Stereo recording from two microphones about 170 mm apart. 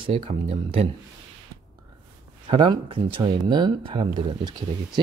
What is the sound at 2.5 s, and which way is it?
Speech, 30° right (ahead or behind).